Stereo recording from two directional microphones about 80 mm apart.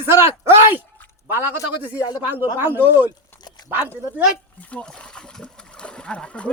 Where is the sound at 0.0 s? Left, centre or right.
Right.